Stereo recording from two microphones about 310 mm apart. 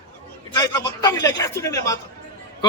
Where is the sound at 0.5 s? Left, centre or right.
Centre.